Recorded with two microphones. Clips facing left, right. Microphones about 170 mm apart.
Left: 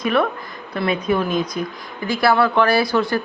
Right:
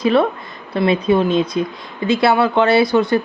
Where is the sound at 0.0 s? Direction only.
25° right (ahead or behind).